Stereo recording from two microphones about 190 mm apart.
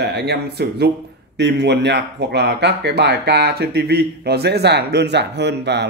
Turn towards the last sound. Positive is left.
turn(degrees=-65)  # may be behind; listen again after turning